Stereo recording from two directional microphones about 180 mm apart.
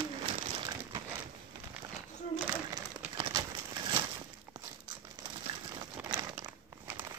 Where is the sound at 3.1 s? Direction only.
25° right (ahead or behind).